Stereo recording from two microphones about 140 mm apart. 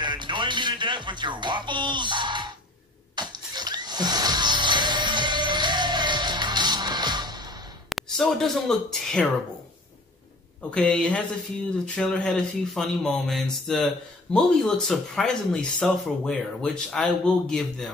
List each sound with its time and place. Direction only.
0.0 s music: 35° right (ahead or behind)
7.9 s speech: centre (ahead or behind)
10.7 s speech: 10° left (ahead or behind)